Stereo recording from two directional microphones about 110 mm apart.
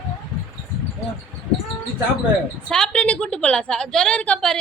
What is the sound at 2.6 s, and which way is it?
A woman's voice, 10° left (ahead or behind).